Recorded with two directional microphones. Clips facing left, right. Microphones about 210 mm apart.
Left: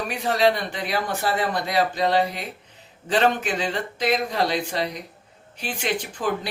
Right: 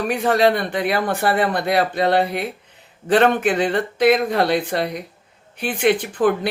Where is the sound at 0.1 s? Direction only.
55° right (ahead or behind).